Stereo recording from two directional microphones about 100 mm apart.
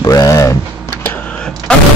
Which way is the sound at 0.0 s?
40° left (ahead or behind).